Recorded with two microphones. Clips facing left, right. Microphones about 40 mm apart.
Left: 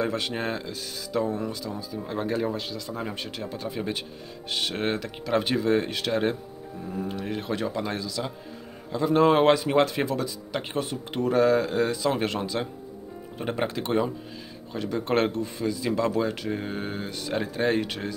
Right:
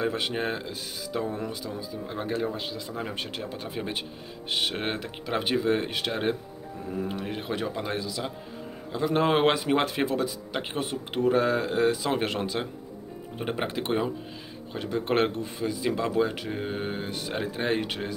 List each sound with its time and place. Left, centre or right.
0.0 s speech: right
2.0 s speech: centre
2.5 s speech: right
3.2 s speech: right
13.4 s speech: right